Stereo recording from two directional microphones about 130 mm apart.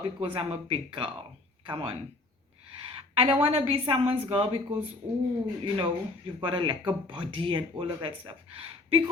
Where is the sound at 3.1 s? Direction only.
45° right (ahead or behind).